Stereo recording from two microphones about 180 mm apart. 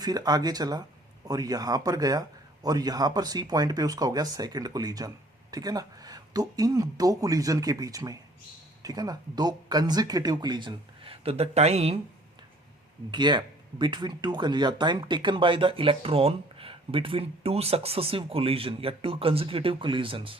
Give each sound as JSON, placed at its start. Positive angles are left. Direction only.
{"t": 0.0, "sound": "speech", "side_deg": -20}
{"t": 13.1, "sound": "speech", "side_deg": -25}